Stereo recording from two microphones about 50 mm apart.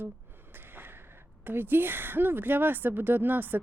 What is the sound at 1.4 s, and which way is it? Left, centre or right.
A woman's voice, right.